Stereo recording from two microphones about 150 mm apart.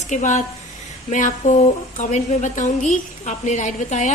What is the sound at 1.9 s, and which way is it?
A woman's voice, 55° left (ahead or behind).